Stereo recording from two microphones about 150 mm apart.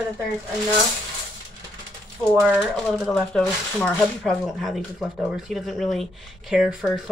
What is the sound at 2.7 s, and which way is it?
Speech, centre (ahead or behind).